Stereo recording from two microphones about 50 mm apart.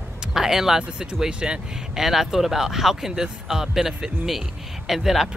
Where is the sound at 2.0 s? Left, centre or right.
Centre.